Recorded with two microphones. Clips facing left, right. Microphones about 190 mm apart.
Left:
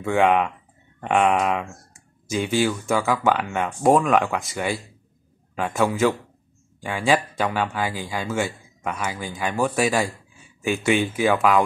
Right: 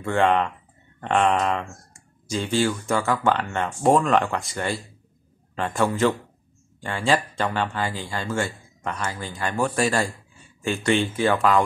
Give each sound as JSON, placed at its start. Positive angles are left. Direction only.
{"t": 0.0, "sound": "speech", "side_deg": 10}